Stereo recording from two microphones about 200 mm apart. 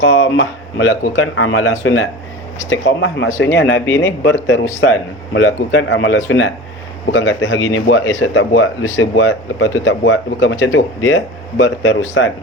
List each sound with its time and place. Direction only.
0.0 s speech: 65° left (ahead or behind)
2.6 s speech: 65° left (ahead or behind)